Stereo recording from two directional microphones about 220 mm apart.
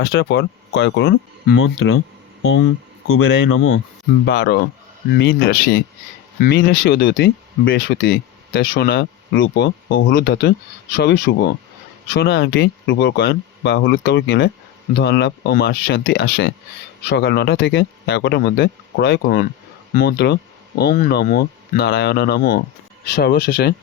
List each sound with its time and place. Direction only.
0.0 s speech: 50° left (ahead or behind)
3.4 s speech: 65° left (ahead or behind)
4.3 s speech: 50° left (ahead or behind)